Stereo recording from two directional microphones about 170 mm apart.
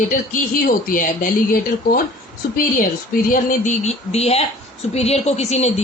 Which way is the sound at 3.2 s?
50° left (ahead or behind).